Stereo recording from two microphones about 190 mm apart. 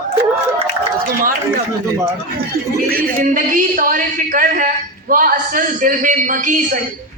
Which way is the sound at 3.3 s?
45° right (ahead or behind).